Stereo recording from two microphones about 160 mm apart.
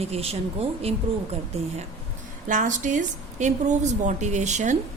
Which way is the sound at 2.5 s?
50° right (ahead or behind).